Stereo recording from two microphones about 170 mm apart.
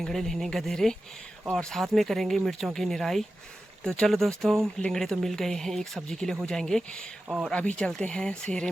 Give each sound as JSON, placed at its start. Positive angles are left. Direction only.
{"t": 0.0, "sound": "speech", "side_deg": 0}